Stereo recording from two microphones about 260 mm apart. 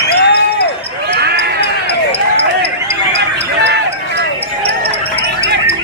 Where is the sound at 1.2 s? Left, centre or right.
Right.